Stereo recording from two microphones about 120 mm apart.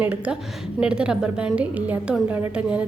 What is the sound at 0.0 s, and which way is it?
A woman's voice, 15° right (ahead or behind).